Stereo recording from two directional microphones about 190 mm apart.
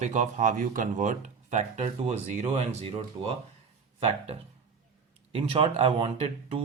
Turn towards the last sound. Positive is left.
turn(degrees=-30)  # may be behind; listen again after turning